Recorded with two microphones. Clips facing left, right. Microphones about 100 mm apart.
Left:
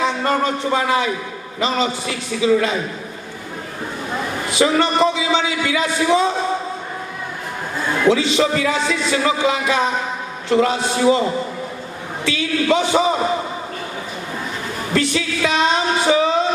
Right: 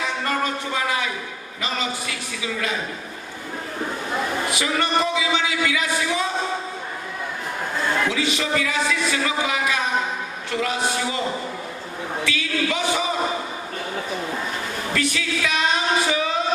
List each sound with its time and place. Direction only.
0.0 s speech: 30° left (ahead or behind)
4.5 s speech: 30° left (ahead or behind)
8.1 s speech: 30° left (ahead or behind)
12.2 s speech: 30° left (ahead or behind)
14.9 s a sound: 30° left (ahead or behind)